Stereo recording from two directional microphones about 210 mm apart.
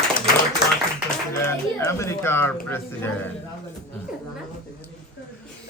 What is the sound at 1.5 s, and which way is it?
Speech, 15° left (ahead or behind).